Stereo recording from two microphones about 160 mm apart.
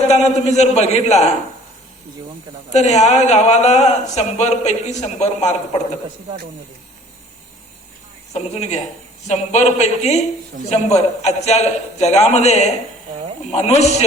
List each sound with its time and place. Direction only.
0.1 s speech: 45° left (ahead or behind)
2.7 s speech: 45° left (ahead or behind)
8.3 s speech: 45° left (ahead or behind)